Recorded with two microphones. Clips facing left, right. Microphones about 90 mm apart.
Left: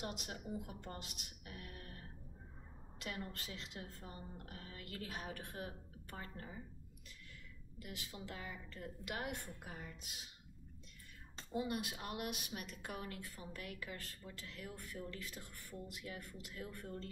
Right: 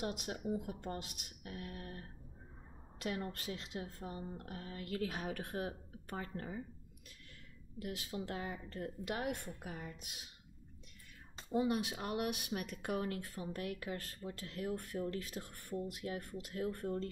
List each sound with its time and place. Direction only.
0.1 s speech: 50° right (ahead or behind)
7.8 s speech: 50° right (ahead or behind)
11.5 s speech: 45° right (ahead or behind)